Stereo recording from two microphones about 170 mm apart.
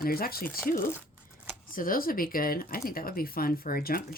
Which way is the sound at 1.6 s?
55° left (ahead or behind).